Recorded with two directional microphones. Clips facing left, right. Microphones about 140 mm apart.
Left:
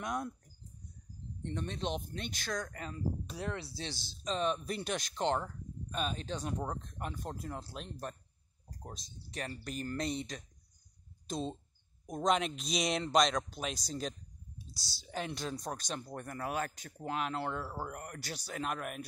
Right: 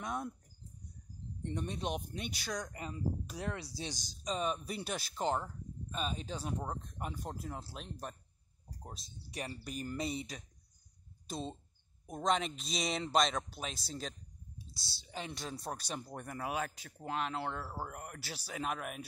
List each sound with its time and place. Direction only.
0.0 s speech: centre (ahead or behind)
1.4 s speech: 15° right (ahead or behind)
14.7 s speech: 25° right (ahead or behind)
15.0 s speech: centre (ahead or behind)